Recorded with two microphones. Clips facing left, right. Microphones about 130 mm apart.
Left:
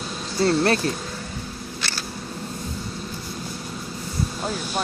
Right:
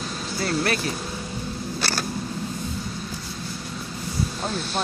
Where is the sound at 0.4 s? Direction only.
30° left (ahead or behind).